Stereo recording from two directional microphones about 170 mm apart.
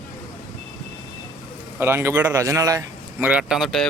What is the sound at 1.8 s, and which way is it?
A man's voice, 15° right (ahead or behind).